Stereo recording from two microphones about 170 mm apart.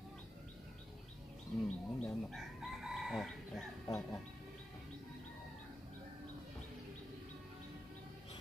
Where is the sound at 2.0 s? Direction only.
Centre (ahead or behind).